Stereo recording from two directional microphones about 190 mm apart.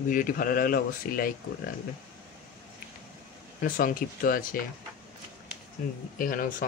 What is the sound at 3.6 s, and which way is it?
Speech, 45° left (ahead or behind).